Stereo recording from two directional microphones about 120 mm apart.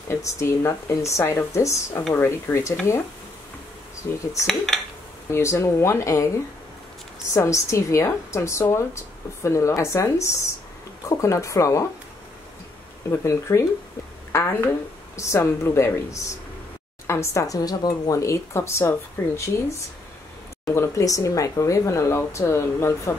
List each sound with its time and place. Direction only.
0.1 s speech: 25° left (ahead or behind)
4.1 s speech: 20° left (ahead or behind)
5.3 s speech: 25° left (ahead or behind)
7.3 s speech: 25° left (ahead or behind)
13.1 s speech: 25° left (ahead or behind)
20.6 s speech: 20° left (ahead or behind)